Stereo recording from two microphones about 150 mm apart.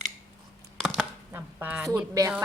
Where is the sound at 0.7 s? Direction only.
Centre (ahead or behind).